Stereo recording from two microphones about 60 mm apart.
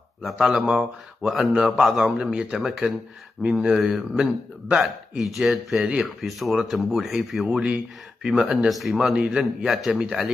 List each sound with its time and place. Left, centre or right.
0.2 s a man's voice: centre
7.5 s a man's voice: centre
8.9 s a man's voice: centre
9.7 s speech: centre